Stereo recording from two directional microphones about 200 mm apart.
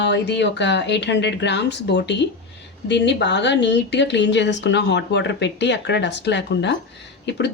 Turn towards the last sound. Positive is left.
turn(degrees=60)  # may be behind; listen again after turning